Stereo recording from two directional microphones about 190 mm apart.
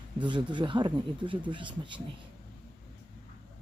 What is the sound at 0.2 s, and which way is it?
Speech, 25° right (ahead or behind).